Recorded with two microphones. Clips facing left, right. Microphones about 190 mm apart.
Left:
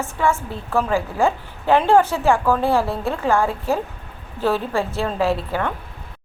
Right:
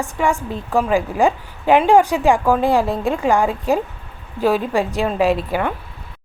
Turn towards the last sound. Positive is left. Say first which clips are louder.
# right 3 dB
turn(degrees=-15)  # may be behind; listen again after turning